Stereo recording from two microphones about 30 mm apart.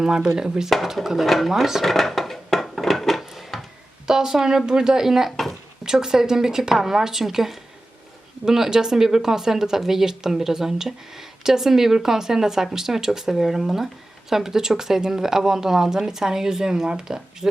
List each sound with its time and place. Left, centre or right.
0.0 s a woman's voice: right
1.0 s speech: centre
1.8 s dishes: centre
3.5 s a sound: centre
4.0 s a woman's voice: centre